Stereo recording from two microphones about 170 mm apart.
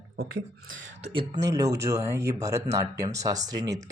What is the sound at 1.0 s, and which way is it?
Speech, 40° right (ahead or behind).